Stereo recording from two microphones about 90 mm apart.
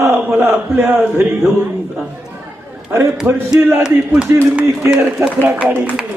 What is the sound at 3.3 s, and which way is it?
Speech, 25° right (ahead or behind).